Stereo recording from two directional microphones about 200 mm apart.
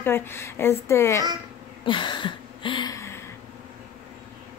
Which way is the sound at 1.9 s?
25° left (ahead or behind).